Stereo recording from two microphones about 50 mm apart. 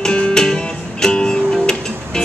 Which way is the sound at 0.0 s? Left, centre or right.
Centre.